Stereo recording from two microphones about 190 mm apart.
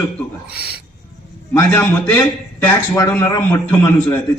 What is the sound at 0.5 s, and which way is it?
Filing, 55° left (ahead or behind).